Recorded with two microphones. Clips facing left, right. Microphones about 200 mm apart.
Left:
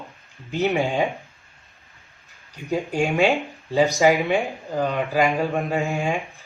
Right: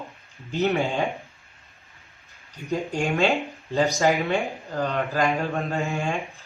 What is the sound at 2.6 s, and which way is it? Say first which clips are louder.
Speech: left 3 dB; 15° left (ahead or behind).